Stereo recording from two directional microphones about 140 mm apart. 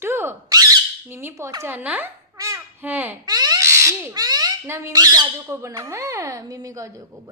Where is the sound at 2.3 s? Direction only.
25° right (ahead or behind).